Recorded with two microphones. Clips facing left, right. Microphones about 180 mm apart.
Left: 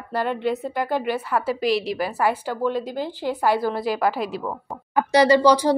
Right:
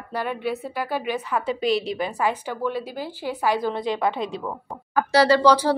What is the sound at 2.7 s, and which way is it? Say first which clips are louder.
Speech: left 4 dB; 10° right (ahead or behind).